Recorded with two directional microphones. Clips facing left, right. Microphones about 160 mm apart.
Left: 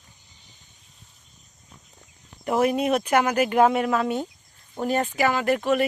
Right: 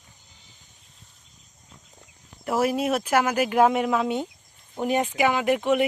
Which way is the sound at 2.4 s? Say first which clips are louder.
Left 2 dB; centre (ahead or behind).